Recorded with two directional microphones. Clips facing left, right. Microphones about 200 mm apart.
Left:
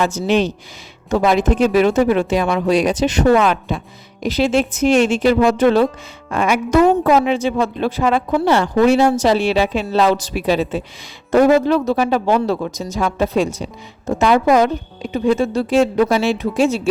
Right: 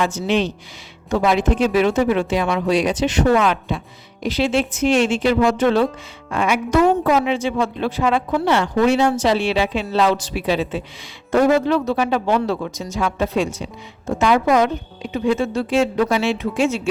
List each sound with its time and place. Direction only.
0.0 s a woman's voice: 40° left (ahead or behind)